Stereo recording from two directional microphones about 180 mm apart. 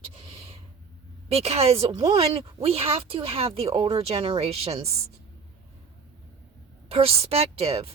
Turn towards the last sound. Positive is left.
turn(degrees=-35)  # may be behind; listen again after turning